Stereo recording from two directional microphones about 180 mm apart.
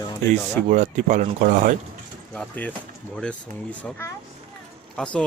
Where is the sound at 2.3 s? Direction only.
10° left (ahead or behind).